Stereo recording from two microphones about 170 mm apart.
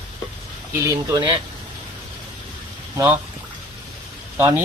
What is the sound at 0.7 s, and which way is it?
Speech, 15° right (ahead or behind).